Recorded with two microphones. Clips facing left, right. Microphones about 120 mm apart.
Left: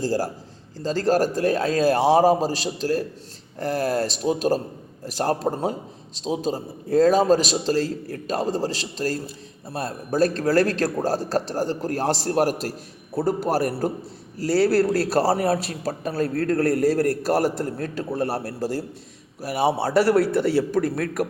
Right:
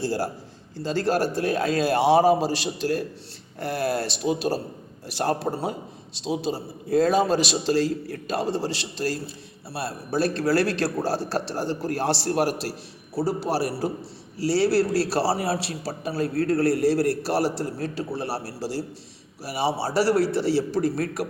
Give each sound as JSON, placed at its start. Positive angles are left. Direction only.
{"t": 0.0, "sound": "a man's voice", "side_deg": 35}